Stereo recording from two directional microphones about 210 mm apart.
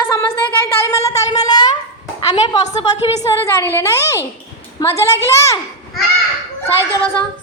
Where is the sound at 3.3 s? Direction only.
10° left (ahead or behind).